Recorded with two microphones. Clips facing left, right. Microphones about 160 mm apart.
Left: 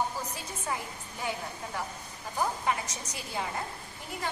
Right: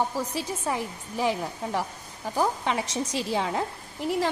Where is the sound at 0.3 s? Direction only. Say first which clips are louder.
Right 7 dB; 90° right.